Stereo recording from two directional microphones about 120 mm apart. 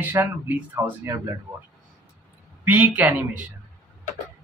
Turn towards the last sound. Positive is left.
turn(degrees=-15)  # may be behind; listen again after turning